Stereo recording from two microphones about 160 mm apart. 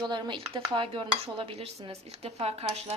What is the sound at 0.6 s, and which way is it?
Dishes, 30° right (ahead or behind).